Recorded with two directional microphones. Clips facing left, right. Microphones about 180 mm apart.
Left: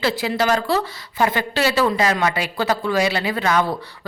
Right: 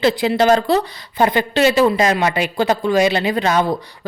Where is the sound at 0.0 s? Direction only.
20° right (ahead or behind).